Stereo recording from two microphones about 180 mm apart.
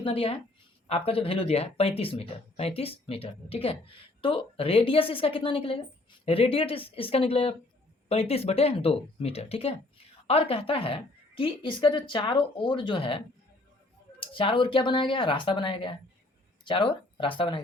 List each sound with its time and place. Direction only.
0.0 s a woman's voice: 30° left (ahead or behind)